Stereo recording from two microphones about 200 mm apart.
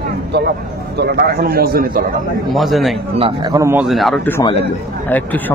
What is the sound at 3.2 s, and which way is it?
Speech, 25° right (ahead or behind).